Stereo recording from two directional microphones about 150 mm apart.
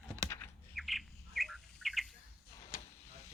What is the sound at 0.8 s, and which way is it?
Bird, centre (ahead or behind).